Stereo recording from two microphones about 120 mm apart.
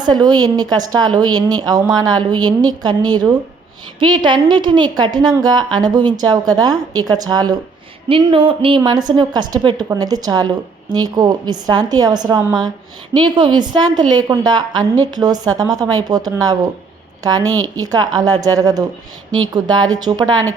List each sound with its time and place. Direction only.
0.0 s a woman's voice: 35° right (ahead or behind)
8.1 s a woman's voice: 45° right (ahead or behind)